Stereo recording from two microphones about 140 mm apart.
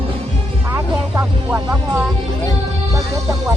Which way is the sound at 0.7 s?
10° right (ahead or behind).